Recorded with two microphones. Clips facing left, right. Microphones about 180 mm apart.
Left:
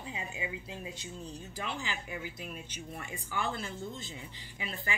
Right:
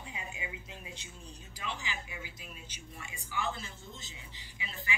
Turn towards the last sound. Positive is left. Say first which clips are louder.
# left 5 dB
turn(degrees=50)  # may be behind; listen again after turning